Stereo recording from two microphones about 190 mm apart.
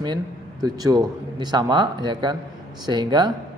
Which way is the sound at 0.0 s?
20° right (ahead or behind).